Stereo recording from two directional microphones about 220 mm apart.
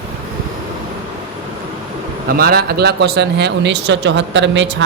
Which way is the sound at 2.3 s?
45° right (ahead or behind).